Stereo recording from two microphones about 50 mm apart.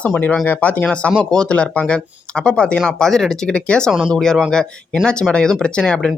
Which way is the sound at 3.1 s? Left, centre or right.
Centre.